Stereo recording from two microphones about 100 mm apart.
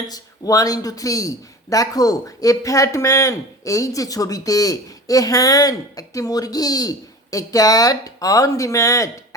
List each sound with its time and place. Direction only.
0.1 s speech: 35° left (ahead or behind)